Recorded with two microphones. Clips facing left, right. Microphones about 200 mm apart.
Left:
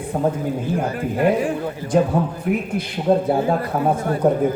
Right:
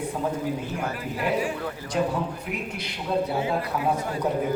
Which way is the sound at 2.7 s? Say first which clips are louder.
Left 7 dB; 50° left (ahead or behind).